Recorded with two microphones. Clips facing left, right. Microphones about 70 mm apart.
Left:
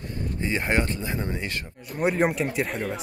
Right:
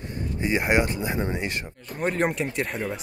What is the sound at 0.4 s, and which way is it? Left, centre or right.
Speech, centre.